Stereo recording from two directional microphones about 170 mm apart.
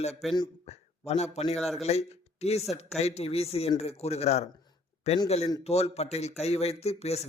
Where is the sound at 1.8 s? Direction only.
40° left (ahead or behind).